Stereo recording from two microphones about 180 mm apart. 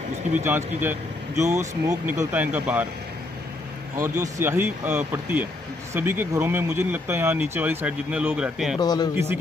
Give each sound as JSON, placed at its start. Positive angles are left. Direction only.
{"t": 0.3, "sound": "speech", "side_deg": -10}
{"t": 3.9, "sound": "speech", "side_deg": -15}
{"t": 8.7, "sound": "speech", "side_deg": 20}
{"t": 9.1, "sound": "speech", "side_deg": -15}